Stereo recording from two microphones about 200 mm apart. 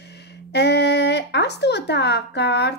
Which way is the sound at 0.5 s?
55° left (ahead or behind).